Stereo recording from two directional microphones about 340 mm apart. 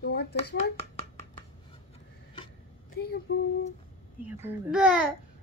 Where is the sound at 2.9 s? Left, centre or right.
Left.